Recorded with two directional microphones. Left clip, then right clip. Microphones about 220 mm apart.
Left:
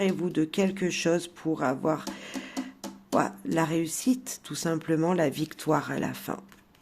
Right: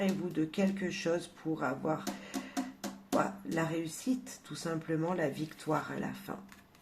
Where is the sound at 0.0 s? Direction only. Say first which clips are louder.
Left 7 dB; 50° left (ahead or behind).